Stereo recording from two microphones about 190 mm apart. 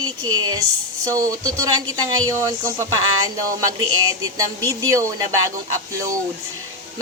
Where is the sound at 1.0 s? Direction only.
15° right (ahead or behind).